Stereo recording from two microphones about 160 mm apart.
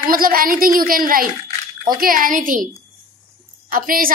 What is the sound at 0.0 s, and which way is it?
A woman's voice, 65° right (ahead or behind).